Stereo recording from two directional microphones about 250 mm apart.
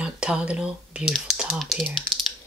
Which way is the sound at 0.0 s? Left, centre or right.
Centre.